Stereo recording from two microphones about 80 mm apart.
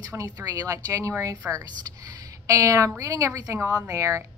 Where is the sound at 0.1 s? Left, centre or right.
Right.